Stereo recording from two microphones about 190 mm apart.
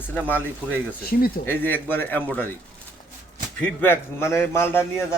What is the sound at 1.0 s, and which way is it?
Speech, 50° left (ahead or behind).